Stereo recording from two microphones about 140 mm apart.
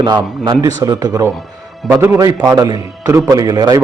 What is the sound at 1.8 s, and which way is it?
Speech, 10° right (ahead or behind).